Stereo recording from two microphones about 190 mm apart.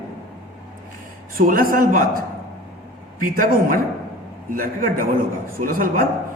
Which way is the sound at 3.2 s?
45° right (ahead or behind).